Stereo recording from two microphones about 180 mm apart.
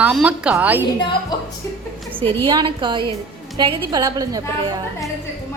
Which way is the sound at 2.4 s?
25° right (ahead or behind).